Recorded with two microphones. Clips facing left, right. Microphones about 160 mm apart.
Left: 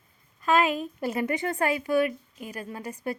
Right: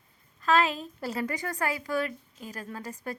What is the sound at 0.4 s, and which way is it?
A woman's voice, 15° left (ahead or behind).